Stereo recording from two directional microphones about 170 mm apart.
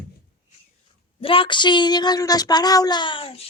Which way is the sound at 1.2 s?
30° left (ahead or behind).